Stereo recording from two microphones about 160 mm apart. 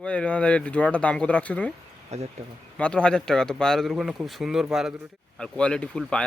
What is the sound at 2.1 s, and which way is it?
Speech, 45° right (ahead or behind).